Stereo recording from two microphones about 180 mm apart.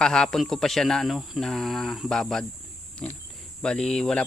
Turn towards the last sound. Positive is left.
turn(degrees=5)  # may be behind; listen again after turning